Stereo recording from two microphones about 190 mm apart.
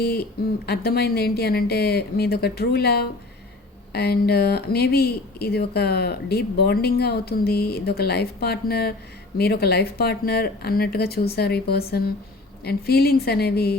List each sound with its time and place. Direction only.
0.0 s speech: 55° left (ahead or behind)